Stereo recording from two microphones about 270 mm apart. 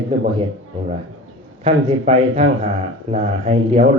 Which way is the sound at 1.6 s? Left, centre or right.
Right.